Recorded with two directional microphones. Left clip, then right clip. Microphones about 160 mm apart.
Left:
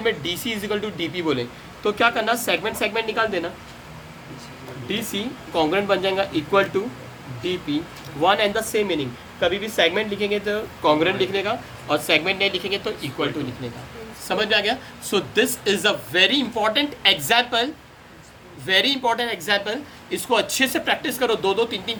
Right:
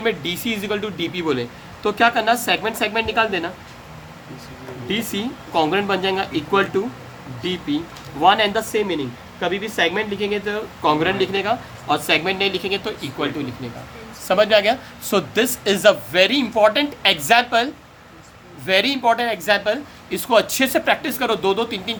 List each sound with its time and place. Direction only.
0.0 s speech: 70° right (ahead or behind)
4.9 s speech: 65° right (ahead or behind)
8.2 s speech: 60° right (ahead or behind)
14.3 s speech: 60° right (ahead or behind)